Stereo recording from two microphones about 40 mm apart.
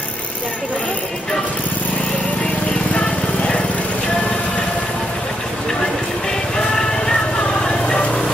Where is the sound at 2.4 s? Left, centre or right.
Left.